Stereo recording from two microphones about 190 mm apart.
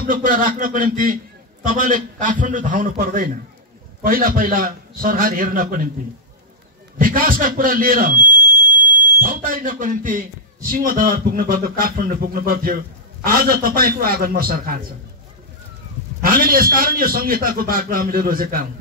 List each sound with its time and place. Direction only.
0.0 s a man's voice: 45° right (ahead or behind)
7.0 s a man's voice: 45° right (ahead or behind)
9.2 s a man's voice: 45° right (ahead or behind)
16.2 s a man's voice: 50° right (ahead or behind)